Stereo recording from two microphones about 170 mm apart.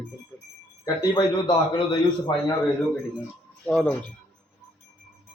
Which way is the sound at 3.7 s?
5° left (ahead or behind).